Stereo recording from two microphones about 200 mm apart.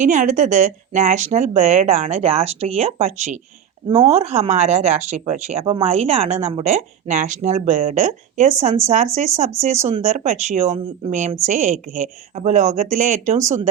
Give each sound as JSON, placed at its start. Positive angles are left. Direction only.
{"t": 0.0, "sound": "speech", "side_deg": -40}
{"t": 9.8, "sound": "speech", "side_deg": -35}